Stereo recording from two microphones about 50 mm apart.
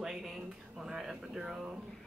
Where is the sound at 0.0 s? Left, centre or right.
Centre.